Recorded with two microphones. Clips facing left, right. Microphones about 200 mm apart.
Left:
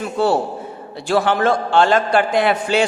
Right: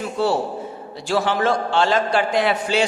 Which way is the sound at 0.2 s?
55° left (ahead or behind).